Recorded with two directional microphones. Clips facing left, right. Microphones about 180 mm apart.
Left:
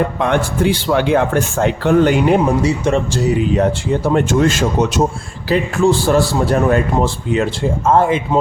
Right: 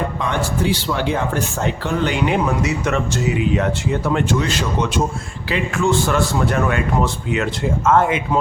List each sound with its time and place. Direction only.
0.2 s speech: 55° left (ahead or behind); by 8.4 s 30° left (ahead or behind)